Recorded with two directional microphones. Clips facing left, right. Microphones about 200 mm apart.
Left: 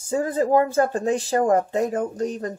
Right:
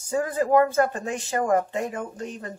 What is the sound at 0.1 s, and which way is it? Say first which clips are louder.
Speech: left 2 dB; 25° left (ahead or behind).